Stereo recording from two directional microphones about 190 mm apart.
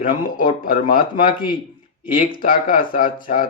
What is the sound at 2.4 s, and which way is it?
Speech, 50° left (ahead or behind).